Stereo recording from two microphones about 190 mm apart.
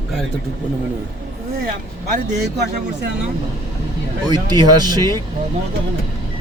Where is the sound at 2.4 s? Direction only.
60° right (ahead or behind).